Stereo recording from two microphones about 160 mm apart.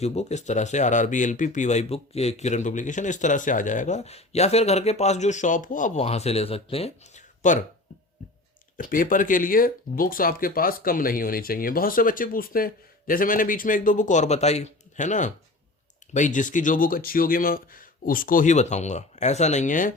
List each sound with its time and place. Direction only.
0.0 s speech: 40° left (ahead or behind)
8.8 s speech: 55° left (ahead or behind)